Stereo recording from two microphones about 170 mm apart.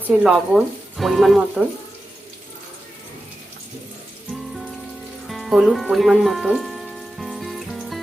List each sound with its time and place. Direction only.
0.2 s speech: 5° right (ahead or behind)
5.3 s music: centre (ahead or behind)